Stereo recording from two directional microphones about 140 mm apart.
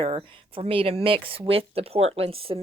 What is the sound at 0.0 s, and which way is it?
Speech, 40° right (ahead or behind).